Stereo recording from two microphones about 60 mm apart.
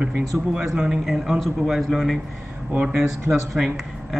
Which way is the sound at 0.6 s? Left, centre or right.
Centre.